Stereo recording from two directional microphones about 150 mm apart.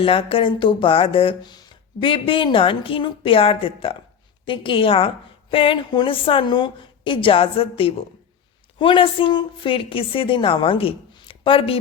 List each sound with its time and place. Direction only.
0.0 s speech: 35° left (ahead or behind)